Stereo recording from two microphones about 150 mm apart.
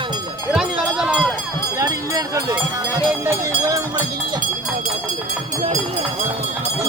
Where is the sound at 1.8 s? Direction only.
20° right (ahead or behind).